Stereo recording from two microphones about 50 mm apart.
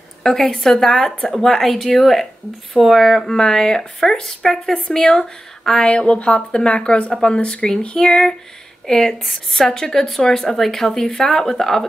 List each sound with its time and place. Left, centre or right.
0.2 s speech: centre